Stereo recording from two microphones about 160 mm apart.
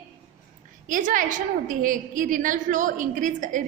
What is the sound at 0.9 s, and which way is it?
A woman's voice, 55° right (ahead or behind).